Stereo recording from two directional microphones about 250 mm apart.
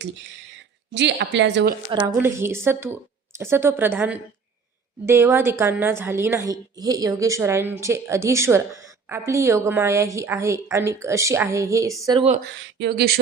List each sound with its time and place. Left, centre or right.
0.9 s a woman's voice: right
1.9 s a woman's voice: centre
12.8 s speech: right